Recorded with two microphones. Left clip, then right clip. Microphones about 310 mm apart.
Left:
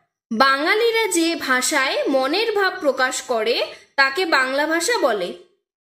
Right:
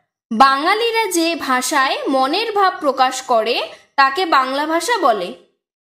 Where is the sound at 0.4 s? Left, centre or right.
Centre.